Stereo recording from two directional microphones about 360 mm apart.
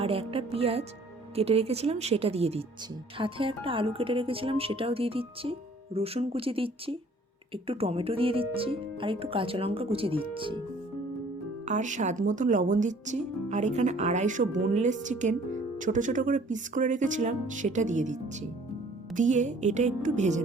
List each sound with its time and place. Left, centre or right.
0.0 s speech: centre
11.6 s speech: centre